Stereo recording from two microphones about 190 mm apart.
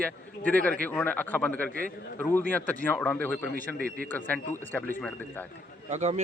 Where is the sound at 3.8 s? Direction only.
50° right (ahead or behind).